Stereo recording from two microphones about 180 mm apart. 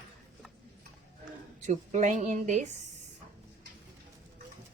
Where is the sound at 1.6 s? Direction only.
40° right (ahead or behind).